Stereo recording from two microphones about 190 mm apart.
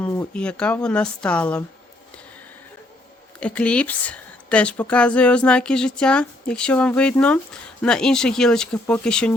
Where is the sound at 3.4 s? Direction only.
5° left (ahead or behind).